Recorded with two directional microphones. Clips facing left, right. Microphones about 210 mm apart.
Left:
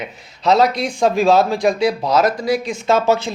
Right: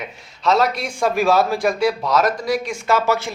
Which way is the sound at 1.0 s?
15° left (ahead or behind).